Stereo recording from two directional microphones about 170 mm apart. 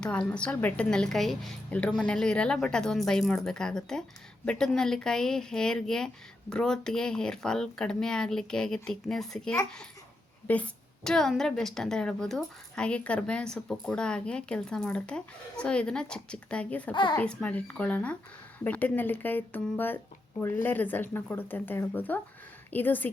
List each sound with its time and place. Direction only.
0.0 s a woman's voice: 5° left (ahead or behind)
16.9 s a child's voice: 30° left (ahead or behind)
17.2 s speech: 10° left (ahead or behind)